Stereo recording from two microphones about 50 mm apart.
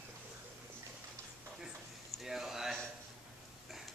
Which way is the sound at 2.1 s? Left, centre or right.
Centre.